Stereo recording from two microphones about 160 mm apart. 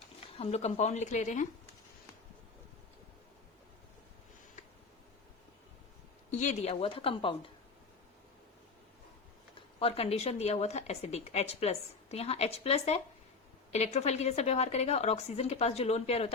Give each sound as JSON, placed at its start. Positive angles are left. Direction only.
{"t": 0.3, "sound": "a woman's voice", "side_deg": 40}
{"t": 6.4, "sound": "a woman's voice", "side_deg": 45}
{"t": 9.8, "sound": "a woman's voice", "side_deg": 40}